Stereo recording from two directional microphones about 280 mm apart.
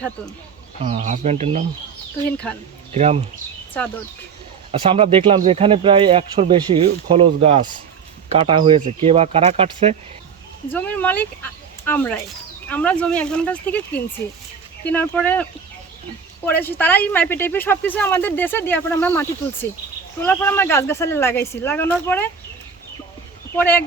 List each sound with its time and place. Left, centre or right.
0.8 s speech: right
2.1 s speech: centre
2.9 s speech: right
4.7 s speech: right
10.7 s speech: centre
23.6 s speech: centre